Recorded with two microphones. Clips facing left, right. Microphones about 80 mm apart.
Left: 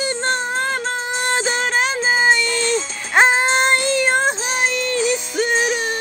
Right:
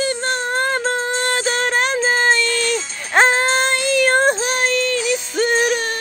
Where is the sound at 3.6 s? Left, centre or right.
Left.